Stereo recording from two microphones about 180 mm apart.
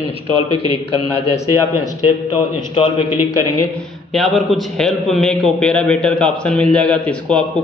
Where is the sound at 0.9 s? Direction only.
35° left (ahead or behind).